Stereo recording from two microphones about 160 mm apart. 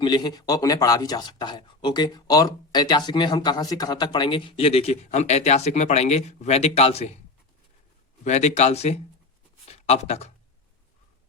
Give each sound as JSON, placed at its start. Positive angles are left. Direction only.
{"t": 0.0, "sound": "speech", "side_deg": 25}
{"t": 8.2, "sound": "speech", "side_deg": 45}